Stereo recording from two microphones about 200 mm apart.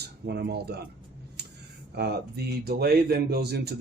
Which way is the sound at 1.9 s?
55° right (ahead or behind).